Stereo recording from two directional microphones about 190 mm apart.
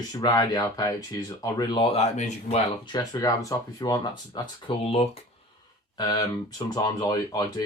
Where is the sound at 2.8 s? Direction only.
20° left (ahead or behind).